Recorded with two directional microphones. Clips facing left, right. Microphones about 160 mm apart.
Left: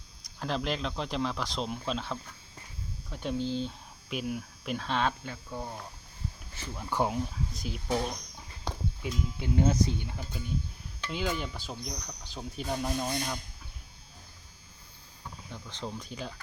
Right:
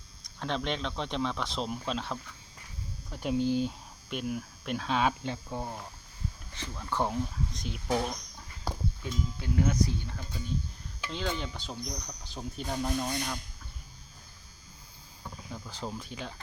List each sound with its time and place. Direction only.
0.2 s speech: 5° left (ahead or behind); by 3.7 s 15° right (ahead or behind)
4.1 s speech: centre (ahead or behind)
5.2 s speech: 25° right (ahead or behind)
6.6 s speech: 10° left (ahead or behind)
8.6 s a sound: centre (ahead or behind)
9.4 s speech: 25° left (ahead or behind); by 13.4 s 10° left (ahead or behind)
15.5 s speech: 5° right (ahead or behind)